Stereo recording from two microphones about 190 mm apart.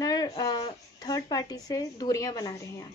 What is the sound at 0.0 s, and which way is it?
Speech, 20° left (ahead or behind).